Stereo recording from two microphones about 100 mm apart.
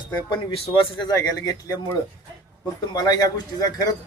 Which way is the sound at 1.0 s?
40° left (ahead or behind).